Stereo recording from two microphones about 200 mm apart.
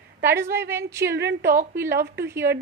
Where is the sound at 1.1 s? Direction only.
55° right (ahead or behind).